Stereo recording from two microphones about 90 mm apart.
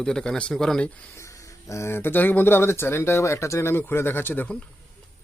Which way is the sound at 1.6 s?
30° left (ahead or behind).